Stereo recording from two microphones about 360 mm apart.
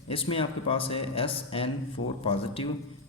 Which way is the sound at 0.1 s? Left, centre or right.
Centre.